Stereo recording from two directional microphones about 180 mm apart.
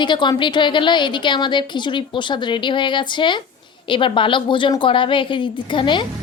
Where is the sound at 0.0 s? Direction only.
25° left (ahead or behind).